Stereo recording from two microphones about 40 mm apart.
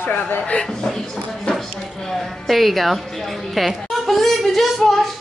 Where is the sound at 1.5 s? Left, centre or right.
Centre.